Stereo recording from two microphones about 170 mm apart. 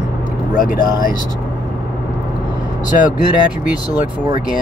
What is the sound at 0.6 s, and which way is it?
Speech, 55° left (ahead or behind).